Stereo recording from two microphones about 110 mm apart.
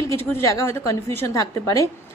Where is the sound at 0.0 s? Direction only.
25° left (ahead or behind).